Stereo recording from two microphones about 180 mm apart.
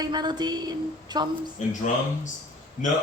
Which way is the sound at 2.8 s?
45° left (ahead or behind).